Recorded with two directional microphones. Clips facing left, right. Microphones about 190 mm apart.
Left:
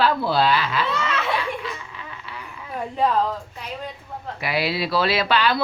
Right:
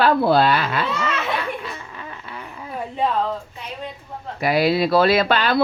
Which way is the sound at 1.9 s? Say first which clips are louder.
Right 2 dB; 50° right (ahead or behind).